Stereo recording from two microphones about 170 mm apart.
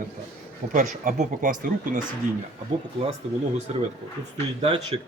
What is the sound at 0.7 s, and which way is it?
Speech, 50° right (ahead or behind).